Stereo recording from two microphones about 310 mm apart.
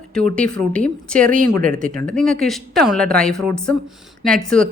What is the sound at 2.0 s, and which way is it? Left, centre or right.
A woman's voice, centre.